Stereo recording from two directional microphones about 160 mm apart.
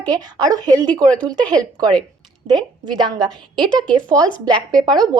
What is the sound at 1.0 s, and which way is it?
Speech, 10° left (ahead or behind).